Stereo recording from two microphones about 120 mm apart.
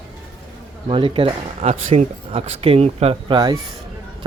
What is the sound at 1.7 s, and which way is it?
Speech, 85° right.